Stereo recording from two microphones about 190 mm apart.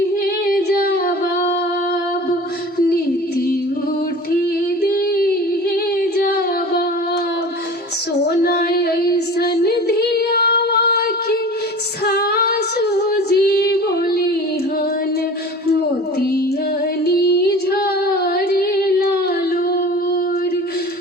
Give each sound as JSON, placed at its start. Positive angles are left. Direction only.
{"t": 0.4, "sound": "female singing", "side_deg": 50}
{"t": 4.8, "sound": "female singing", "side_deg": 55}
{"t": 6.0, "sound": "a sound", "side_deg": 50}
{"t": 8.2, "sound": "female singing", "side_deg": 55}
{"t": 17.1, "sound": "female singing", "side_deg": 55}